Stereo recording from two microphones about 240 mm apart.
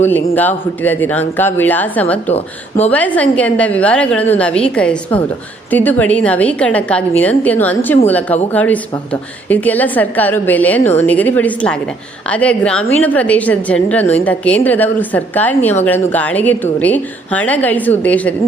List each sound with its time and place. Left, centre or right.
0.0 s a woman's voice: centre
2.3 s speech: left
2.9 s a woman's voice: centre